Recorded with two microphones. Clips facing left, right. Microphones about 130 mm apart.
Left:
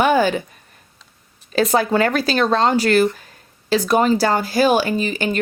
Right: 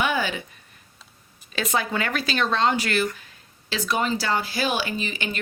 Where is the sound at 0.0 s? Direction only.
45° left (ahead or behind).